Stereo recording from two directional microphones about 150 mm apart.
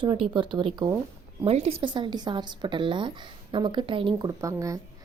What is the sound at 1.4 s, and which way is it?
A woman's voice, 45° right (ahead or behind).